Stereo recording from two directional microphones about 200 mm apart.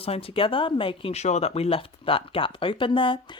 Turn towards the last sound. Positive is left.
turn(degrees=25)  # may be behind; listen again after turning